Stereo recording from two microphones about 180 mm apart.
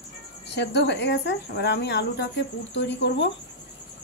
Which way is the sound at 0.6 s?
75° left (ahead or behind).